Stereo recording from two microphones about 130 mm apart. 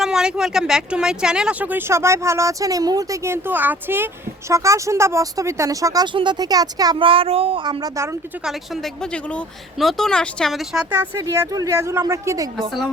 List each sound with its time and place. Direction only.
0.0 s speech: 5° right (ahead or behind); by 6.9 s 30° right (ahead or behind)
7.0 s speech: 45° right (ahead or behind)
8.4 s speech: centre (ahead or behind)
11.0 s speech: 20° right (ahead or behind)